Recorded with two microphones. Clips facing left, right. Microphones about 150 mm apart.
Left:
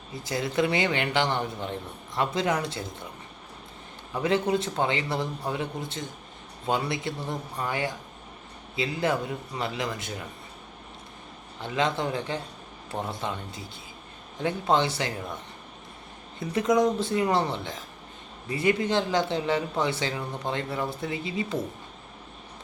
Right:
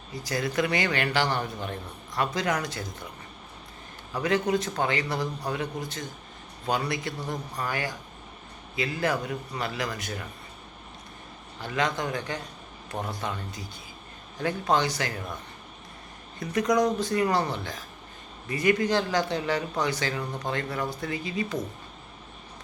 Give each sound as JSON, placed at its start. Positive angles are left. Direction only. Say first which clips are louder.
{"t": 0.1, "sound": "a man's voice", "louder": "even", "side_deg": 25}
{"t": 4.1, "sound": "a man's voice", "louder": "left 1 dB", "side_deg": 25}
{"t": 11.6, "sound": "a man's voice", "louder": "left 1 dB", "side_deg": 25}
{"t": 16.4, "sound": "a man's voice", "louder": "left 1 dB", "side_deg": 25}